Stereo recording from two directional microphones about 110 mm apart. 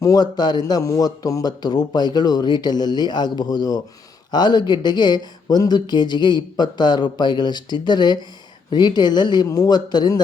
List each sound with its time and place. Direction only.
0.0 s speech: 35° left (ahead or behind)